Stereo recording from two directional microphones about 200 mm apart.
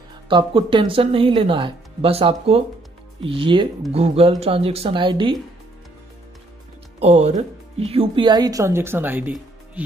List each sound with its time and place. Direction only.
0.3 s speech: 25° right (ahead or behind)
7.0 s speech: 30° right (ahead or behind); by 9.8 s 10° right (ahead or behind)